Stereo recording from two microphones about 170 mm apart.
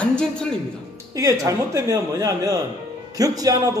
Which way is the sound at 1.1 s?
20° right (ahead or behind).